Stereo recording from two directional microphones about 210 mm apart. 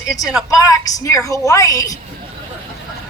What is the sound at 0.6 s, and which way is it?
A woman's voice, 15° left (ahead or behind).